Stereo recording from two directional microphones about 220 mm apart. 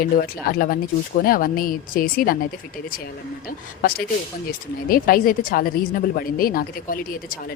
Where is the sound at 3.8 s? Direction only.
40° left (ahead or behind).